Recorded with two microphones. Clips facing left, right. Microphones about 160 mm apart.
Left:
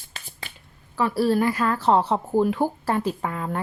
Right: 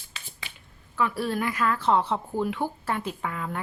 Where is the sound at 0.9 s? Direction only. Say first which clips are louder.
Left 6 dB; 35° left (ahead or behind).